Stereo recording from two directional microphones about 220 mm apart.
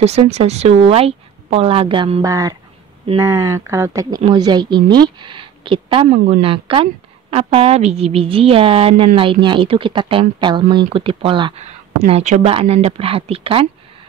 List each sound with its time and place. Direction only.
0.0 s a woman's voice: 30° right (ahead or behind)